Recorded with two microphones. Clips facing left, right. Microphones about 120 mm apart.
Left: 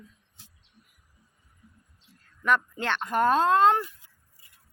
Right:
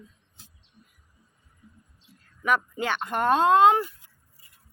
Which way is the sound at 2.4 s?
5° right (ahead or behind).